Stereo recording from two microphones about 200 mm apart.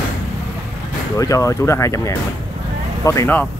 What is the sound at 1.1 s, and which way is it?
Speech, 15° left (ahead or behind).